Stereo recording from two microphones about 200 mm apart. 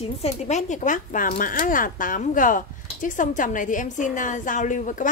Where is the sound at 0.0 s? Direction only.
30° left (ahead or behind).